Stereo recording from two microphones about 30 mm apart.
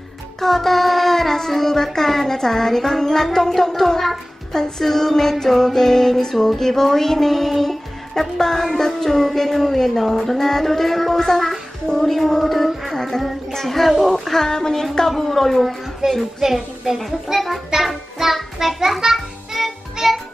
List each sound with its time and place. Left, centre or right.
0.4 s child singing: centre
1.5 s music: centre
12.9 s music: centre
13.7 s music: centre
14.3 s music: centre
16.0 s a woman's voice: right
16.3 s a child's voice: centre
18.8 s a child's voice: centre
19.1 s music: centre